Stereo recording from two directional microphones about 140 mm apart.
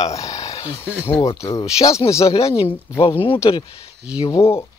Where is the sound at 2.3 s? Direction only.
35° left (ahead or behind).